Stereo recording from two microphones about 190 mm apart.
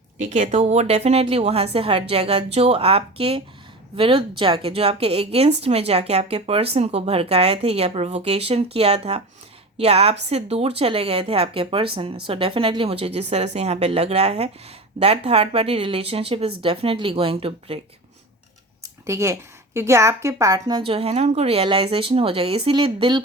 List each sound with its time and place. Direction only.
0.2 s a woman's voice: 40° right (ahead or behind)
18.8 s a woman's voice: 15° right (ahead or behind)